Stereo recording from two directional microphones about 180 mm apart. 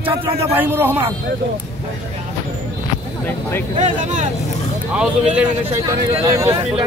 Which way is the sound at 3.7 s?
40° right (ahead or behind).